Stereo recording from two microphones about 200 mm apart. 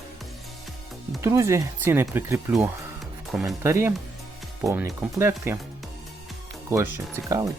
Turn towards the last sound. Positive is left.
turn(degrees=-15)  # may be behind; listen again after turning